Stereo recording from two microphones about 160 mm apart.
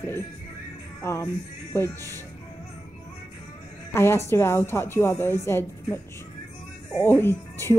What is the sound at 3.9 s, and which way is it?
A woman's voice, 15° left (ahead or behind).